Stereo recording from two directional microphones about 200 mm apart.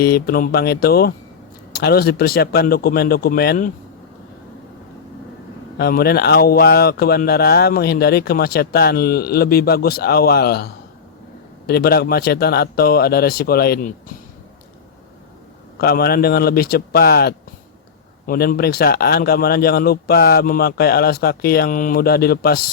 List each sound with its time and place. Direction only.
0.0 s speech: 50° left (ahead or behind)
5.7 s speech: 50° left (ahead or behind)
15.8 s speech: 50° left (ahead or behind)